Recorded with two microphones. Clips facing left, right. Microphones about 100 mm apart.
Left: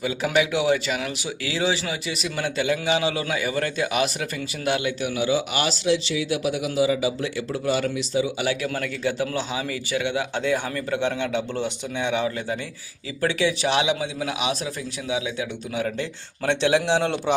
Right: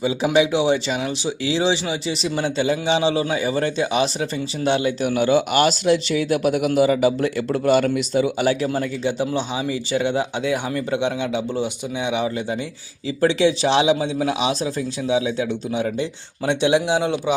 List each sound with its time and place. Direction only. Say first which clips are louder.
0.0 s speech: right 5 dB; 25° right (ahead or behind)
5.0 s speech: right 6 dB; 50° right (ahead or behind)
8.4 s speech: right 5 dB; 30° right (ahead or behind)
9.9 s a man's voice: right 4 dB; 30° right (ahead or behind)
10.3 s speech: right 2 dB; 15° right (ahead or behind)
13.2 s a man's voice: right 5 dB; 30° right (ahead or behind); by 17.3 s 10° right (ahead or behind)